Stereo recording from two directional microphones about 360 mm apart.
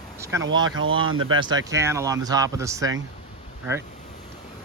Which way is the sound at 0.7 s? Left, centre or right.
Right.